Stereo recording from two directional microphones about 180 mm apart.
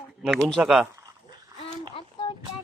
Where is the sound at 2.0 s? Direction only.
30° left (ahead or behind).